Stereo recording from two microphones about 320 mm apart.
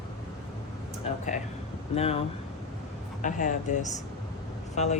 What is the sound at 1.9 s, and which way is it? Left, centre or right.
Speech, centre.